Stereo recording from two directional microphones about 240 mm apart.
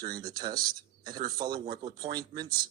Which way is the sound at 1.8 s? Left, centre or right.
Centre.